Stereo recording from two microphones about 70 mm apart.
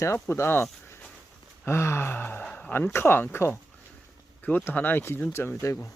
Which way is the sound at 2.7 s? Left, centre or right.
Left.